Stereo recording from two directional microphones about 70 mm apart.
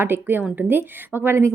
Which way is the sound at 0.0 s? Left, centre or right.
Right.